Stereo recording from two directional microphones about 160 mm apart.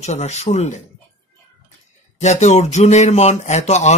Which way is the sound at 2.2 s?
45° left (ahead or behind).